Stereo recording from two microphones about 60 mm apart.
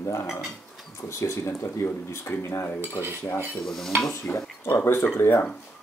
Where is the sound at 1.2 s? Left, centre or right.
Left.